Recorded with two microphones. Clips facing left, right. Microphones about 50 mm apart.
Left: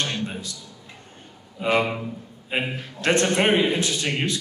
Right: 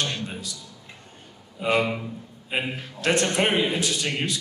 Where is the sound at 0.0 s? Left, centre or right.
Left.